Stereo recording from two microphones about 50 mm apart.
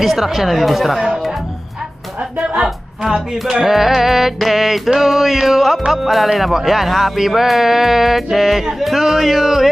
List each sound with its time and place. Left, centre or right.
0.0 s speech: centre
2.4 s music: right
2.6 s speech: centre